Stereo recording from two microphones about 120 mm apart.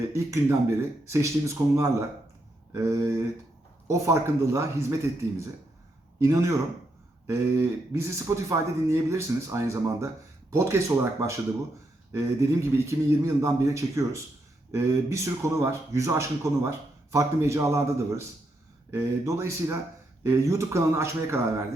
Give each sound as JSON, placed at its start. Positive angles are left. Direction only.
{"t": 0.1, "sound": "speech", "side_deg": -25}
{"t": 6.1, "sound": "speech", "side_deg": -25}